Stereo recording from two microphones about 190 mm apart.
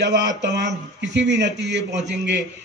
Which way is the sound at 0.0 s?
65° right (ahead or behind).